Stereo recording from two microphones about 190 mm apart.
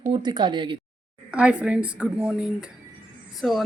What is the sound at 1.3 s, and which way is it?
Speech, 5° right (ahead or behind).